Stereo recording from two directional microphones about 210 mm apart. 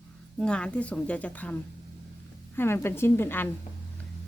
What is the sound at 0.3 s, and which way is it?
Speech, 5° left (ahead or behind).